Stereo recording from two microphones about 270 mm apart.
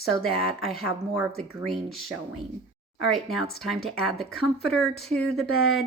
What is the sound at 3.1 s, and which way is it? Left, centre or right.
Speech, centre.